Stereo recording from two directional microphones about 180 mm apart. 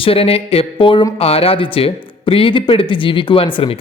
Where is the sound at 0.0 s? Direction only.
30° left (ahead or behind).